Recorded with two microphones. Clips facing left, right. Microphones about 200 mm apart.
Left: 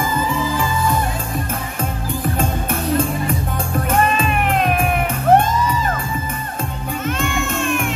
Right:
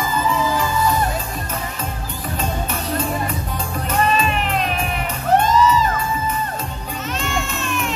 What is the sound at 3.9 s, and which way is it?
Music, 50° left (ahead or behind).